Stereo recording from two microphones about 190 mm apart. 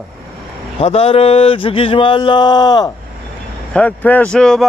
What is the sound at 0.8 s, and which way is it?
A man's voice, 30° left (ahead or behind).